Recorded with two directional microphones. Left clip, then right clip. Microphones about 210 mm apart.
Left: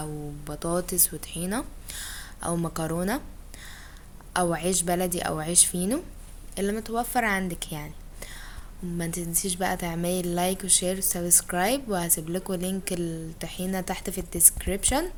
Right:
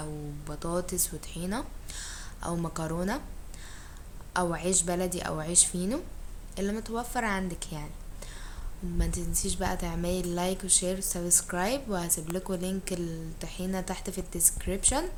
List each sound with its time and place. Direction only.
0.0 s speech: 35° left (ahead or behind)
4.4 s a woman's voice: 35° left (ahead or behind)